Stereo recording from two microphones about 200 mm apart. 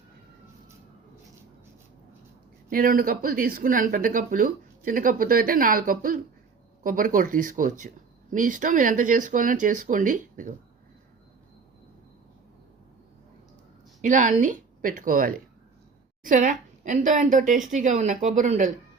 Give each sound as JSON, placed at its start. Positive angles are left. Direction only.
{"t": 2.6, "sound": "a woman's voice", "side_deg": -45}
{"t": 14.0, "sound": "a woman's voice", "side_deg": -40}